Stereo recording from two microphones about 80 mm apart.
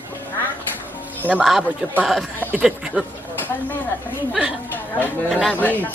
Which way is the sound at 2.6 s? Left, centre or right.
Centre.